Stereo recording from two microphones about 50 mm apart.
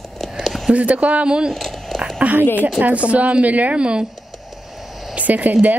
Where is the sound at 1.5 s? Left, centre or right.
Centre.